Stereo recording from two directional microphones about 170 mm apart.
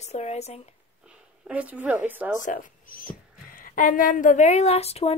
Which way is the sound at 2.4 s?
50° left (ahead or behind).